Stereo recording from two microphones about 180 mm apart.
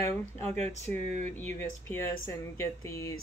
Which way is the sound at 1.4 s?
10° left (ahead or behind).